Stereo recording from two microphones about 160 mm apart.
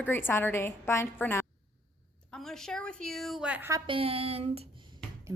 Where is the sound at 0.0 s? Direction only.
15° left (ahead or behind).